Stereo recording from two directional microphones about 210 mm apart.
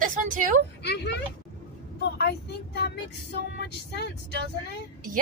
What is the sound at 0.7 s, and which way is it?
Speech, 55° left (ahead or behind).